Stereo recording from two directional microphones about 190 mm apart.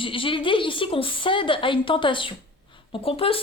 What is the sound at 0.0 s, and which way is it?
Speech, 25° left (ahead or behind).